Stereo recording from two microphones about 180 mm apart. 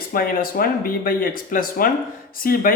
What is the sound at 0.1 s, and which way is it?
Speech, 55° left (ahead or behind).